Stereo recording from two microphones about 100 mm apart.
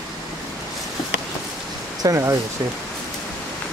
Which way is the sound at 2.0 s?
30° right (ahead or behind).